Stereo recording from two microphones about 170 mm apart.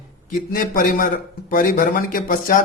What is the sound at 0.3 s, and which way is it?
A man's voice, 55° left (ahead or behind).